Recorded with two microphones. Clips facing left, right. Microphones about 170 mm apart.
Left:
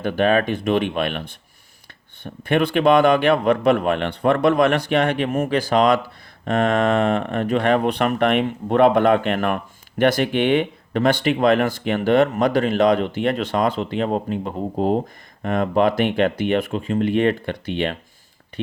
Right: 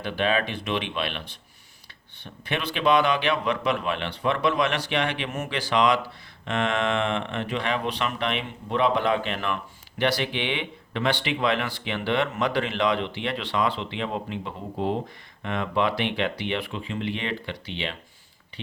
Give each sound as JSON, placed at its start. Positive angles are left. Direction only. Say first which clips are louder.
{"t": 0.0, "sound": "speech", "louder": "left 7 dB", "side_deg": 45}
{"t": 2.2, "sound": "speech", "louder": "left 11 dB", "side_deg": 50}